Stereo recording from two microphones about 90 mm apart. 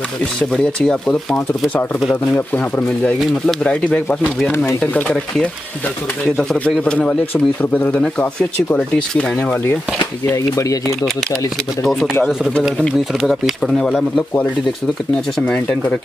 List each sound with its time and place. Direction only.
0.5 s speech: 5° left (ahead or behind)
6.3 s speech: 10° left (ahead or behind)
10.3 s speech: 35° left (ahead or behind)
11.8 s speech: centre (ahead or behind)
15.3 s speech: 10° left (ahead or behind)